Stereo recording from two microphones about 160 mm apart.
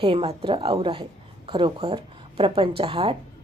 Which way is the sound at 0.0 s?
35° right (ahead or behind).